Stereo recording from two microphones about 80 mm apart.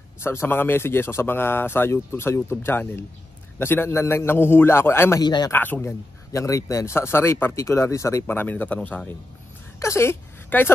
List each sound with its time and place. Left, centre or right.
0.2 s speech: left
5.2 s speech: left
5.5 s speech: left
5.8 s speech: left
8.3 s speech: left
9.8 s a sound: left